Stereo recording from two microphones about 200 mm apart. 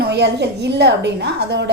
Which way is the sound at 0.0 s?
60° right (ahead or behind).